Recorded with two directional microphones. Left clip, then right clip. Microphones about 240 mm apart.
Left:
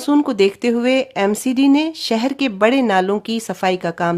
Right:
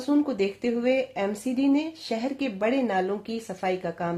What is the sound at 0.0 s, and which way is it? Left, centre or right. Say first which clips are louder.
Speech: left 10 dB; left.